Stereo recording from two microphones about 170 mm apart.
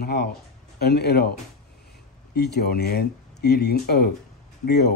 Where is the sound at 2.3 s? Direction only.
75° left (ahead or behind).